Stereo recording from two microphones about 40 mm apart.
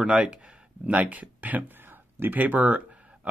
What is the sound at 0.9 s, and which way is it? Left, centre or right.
Speech, right.